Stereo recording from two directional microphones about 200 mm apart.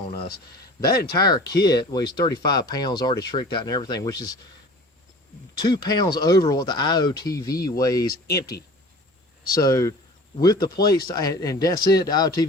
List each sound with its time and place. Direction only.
1.1 s speech: 20° left (ahead or behind)
5.6 s speech: 20° left (ahead or behind)
9.6 s speech: 15° left (ahead or behind)